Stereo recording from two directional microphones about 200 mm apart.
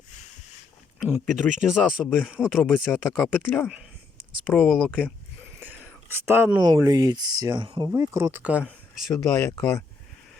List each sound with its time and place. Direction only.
0.9 s speech: 5° right (ahead or behind)
6.2 s speech: 10° right (ahead or behind)
9.5 s speech: 15° left (ahead or behind)